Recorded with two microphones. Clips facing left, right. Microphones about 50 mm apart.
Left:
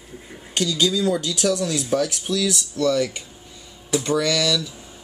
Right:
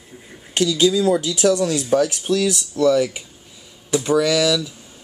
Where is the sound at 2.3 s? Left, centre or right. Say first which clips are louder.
Right 5 dB; right.